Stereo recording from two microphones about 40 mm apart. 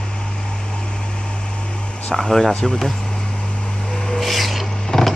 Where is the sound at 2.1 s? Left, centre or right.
Centre.